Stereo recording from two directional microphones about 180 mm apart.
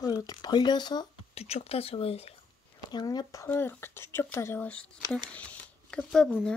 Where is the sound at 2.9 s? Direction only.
25° left (ahead or behind).